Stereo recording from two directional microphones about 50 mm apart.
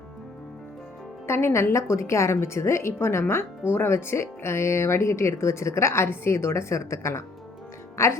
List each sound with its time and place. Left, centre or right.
1.3 s a woman's voice: left